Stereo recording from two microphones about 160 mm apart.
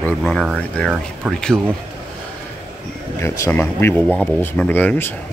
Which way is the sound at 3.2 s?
15° left (ahead or behind).